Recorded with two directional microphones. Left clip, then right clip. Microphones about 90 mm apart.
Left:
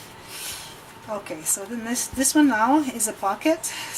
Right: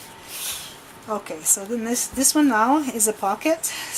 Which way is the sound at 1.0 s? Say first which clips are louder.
Right 4 dB; 20° right (ahead or behind).